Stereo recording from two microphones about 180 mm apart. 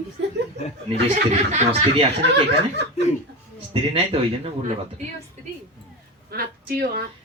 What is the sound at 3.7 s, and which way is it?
Speech, 30° right (ahead or behind).